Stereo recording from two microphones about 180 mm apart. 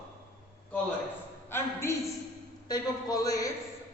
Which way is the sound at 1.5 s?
15° left (ahead or behind).